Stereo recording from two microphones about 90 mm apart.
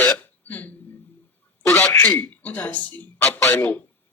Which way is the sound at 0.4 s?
15° left (ahead or behind).